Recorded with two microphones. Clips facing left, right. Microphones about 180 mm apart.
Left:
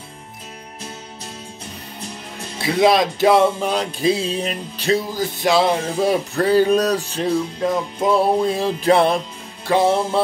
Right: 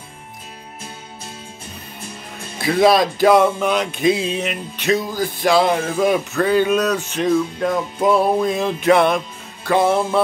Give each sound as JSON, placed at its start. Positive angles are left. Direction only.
{"t": 2.6, "sound": "speech", "side_deg": 20}
{"t": 9.7, "sound": "music", "side_deg": 25}